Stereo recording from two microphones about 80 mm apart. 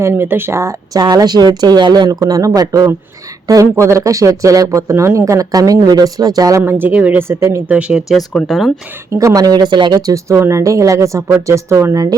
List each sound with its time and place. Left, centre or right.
0.0 s speech: right
0.9 s speech: right
2.0 s speech: right
6.7 s speech: right
7.7 s speech: centre
8.0 s speech: centre
9.1 s speech: right
10.1 s speech: right